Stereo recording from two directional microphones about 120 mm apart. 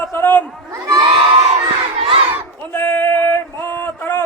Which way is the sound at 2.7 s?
15° left (ahead or behind).